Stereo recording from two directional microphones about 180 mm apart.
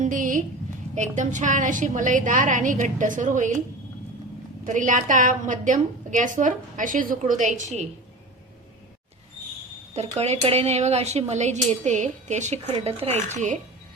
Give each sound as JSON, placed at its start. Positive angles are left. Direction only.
{"t": 0.0, "sound": "a sound", "side_deg": -50}
{"t": 0.9, "sound": "a woman's voice", "side_deg": -40}
{"t": 4.6, "sound": "a woman's voice", "side_deg": -45}
{"t": 9.9, "sound": "a woman's voice", "side_deg": -35}